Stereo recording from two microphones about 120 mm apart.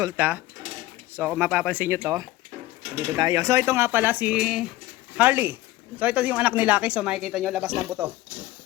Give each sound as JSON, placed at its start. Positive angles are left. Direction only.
{"t": 0.2, "sound": "speech", "side_deg": -15}
{"t": 2.9, "sound": "speech", "side_deg": -30}
{"t": 8.0, "sound": "speech", "side_deg": -20}